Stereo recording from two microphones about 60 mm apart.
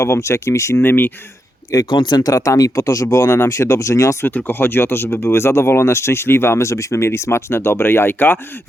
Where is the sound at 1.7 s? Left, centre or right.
Left.